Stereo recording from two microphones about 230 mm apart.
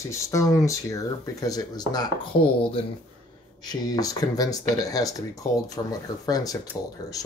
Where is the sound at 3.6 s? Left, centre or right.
Centre.